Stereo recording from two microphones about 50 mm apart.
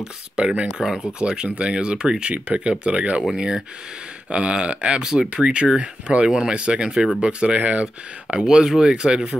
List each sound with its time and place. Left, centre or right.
0.0 s speech: centre
6.2 s speech: centre